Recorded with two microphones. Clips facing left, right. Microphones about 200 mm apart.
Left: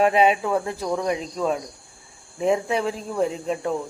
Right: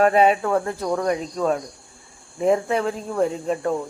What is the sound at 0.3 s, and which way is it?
Speech, 10° left (ahead or behind).